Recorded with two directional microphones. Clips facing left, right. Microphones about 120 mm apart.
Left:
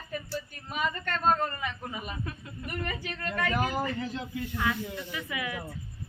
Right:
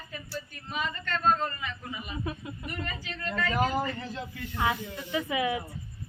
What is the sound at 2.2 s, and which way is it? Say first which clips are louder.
Speech: right 4 dB; 20° right (ahead or behind).